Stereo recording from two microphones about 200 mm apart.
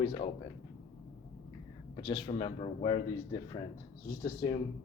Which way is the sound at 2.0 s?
25° left (ahead or behind).